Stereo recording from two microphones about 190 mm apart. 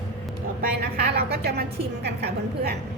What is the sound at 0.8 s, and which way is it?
A woman's voice, 55° right (ahead or behind).